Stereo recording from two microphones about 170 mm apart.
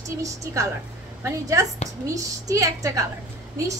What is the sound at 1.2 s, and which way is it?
A woman's voice, 20° right (ahead or behind).